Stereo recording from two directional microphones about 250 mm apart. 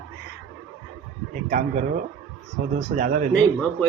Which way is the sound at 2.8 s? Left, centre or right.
Right.